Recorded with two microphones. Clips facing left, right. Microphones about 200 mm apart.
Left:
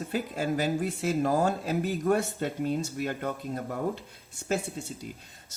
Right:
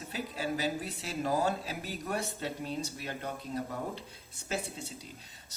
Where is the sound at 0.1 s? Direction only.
50° left (ahead or behind).